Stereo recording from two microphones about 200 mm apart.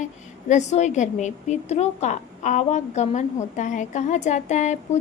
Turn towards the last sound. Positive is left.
turn(degrees=35)  # may be behind; listen again after turning